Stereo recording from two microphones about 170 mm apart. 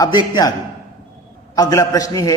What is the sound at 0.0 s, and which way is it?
Speech, 25° left (ahead or behind).